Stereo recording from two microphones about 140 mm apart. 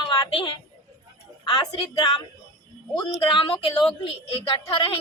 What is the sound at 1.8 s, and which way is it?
Speech, 35° left (ahead or behind).